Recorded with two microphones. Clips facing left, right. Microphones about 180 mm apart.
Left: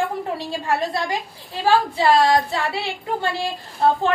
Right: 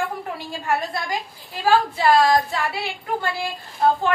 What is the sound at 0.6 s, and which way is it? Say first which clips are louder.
A woman's voice: left 1 dB; 30° left (ahead or behind).